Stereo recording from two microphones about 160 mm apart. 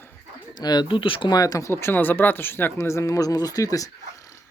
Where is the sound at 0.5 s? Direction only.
25° left (ahead or behind).